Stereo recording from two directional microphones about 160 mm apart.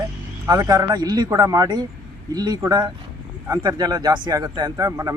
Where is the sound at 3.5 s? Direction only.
25° right (ahead or behind).